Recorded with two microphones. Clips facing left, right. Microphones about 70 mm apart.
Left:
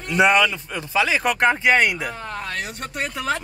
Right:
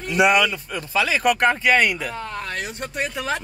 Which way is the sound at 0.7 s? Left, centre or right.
Left.